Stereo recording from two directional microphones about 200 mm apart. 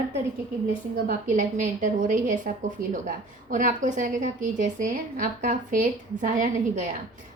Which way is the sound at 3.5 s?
40° right (ahead or behind).